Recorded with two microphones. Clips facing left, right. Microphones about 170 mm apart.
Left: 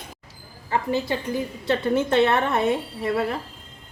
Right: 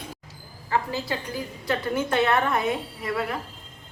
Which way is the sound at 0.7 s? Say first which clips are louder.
Left 3 dB; 20° left (ahead or behind).